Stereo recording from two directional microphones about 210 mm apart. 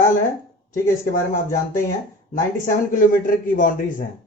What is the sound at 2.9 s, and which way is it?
Speech, 40° left (ahead or behind).